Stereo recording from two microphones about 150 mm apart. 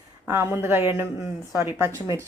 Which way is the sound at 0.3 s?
20° right (ahead or behind).